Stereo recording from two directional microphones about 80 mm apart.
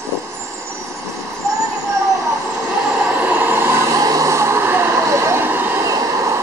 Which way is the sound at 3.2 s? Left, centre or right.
Right.